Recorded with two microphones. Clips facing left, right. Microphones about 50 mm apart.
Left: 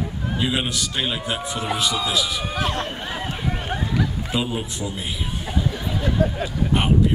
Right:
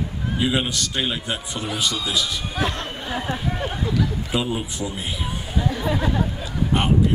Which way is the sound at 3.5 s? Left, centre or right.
Centre.